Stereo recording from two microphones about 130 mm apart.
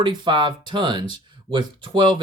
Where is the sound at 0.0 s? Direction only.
35° right (ahead or behind).